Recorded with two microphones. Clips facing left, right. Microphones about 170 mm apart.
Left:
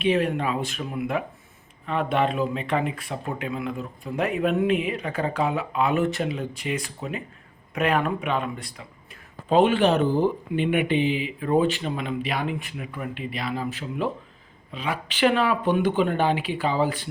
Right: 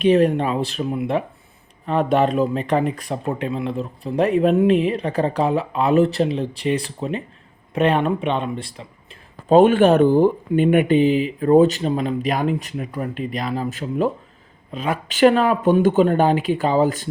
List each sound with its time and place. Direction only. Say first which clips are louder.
0.0 s speech: right 7 dB; 40° right (ahead or behind)
1.9 s speech: right 6 dB; 40° right (ahead or behind)
9.5 s speech: right 6 dB; 50° right (ahead or behind)